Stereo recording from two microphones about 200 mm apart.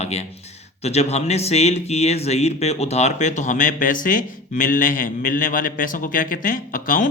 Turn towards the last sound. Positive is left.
turn(degrees=45)  # may be behind; listen again after turning